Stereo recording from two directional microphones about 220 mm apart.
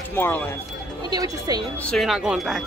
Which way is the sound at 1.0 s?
15° right (ahead or behind).